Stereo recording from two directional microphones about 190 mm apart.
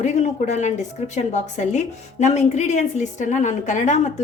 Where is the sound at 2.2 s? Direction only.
35° left (ahead or behind).